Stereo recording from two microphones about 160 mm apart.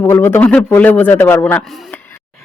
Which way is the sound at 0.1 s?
15° left (ahead or behind).